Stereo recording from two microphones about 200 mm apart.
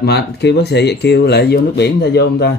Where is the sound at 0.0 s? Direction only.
55° left (ahead or behind).